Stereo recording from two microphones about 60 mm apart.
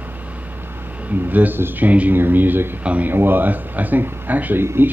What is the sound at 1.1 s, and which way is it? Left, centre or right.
Speech, right.